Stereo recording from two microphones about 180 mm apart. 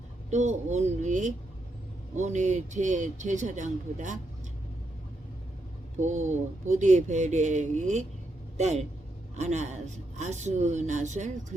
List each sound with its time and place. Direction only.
0.3 s speech: 40° right (ahead or behind)
6.0 s speech: 40° right (ahead or behind)